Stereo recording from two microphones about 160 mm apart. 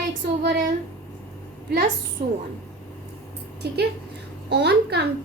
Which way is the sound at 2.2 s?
55° right (ahead or behind).